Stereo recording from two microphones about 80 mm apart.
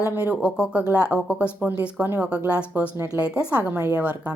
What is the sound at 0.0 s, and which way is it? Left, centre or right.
Speech, right.